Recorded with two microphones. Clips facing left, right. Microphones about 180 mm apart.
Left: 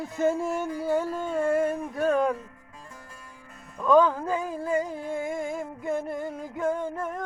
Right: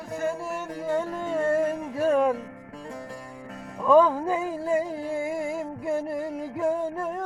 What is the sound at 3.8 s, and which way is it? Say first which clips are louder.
Music: right 2 dB; 10° right (ahead or behind).